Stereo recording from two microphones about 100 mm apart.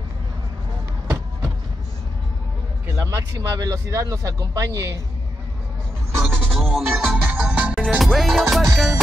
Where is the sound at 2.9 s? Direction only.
30° right (ahead or behind).